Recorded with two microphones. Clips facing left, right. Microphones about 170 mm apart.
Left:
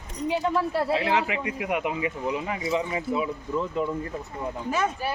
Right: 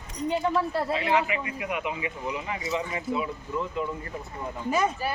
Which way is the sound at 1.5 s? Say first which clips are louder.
Left 4 dB; 65° left (ahead or behind).